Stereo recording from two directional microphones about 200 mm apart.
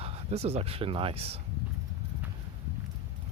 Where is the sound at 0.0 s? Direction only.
30° right (ahead or behind).